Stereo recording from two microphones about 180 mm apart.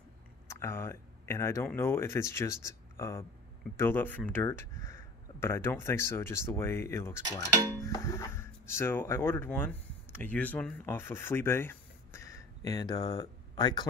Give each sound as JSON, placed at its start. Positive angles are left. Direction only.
{"t": 0.5, "sound": "speech", "side_deg": 15}